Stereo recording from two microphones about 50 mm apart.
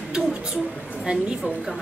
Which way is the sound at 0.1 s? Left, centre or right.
Centre.